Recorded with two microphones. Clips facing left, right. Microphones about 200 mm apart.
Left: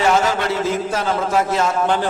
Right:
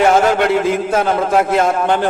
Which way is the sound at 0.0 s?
55° right (ahead or behind).